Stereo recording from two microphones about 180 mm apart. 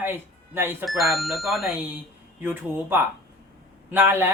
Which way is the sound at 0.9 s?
Centre (ahead or behind).